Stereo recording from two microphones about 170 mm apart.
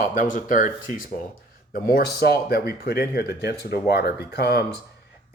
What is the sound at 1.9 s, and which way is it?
Speech, 70° left (ahead or behind).